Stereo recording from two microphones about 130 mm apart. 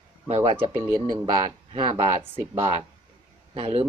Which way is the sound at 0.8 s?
25° right (ahead or behind).